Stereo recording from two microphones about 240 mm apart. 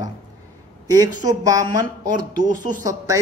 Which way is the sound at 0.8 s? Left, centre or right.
Centre.